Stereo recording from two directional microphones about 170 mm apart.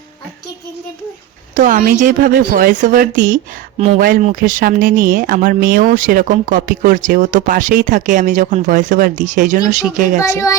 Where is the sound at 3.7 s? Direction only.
35° right (ahead or behind).